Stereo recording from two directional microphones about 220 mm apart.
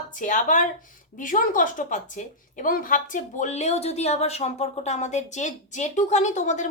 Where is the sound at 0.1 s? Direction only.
35° left (ahead or behind).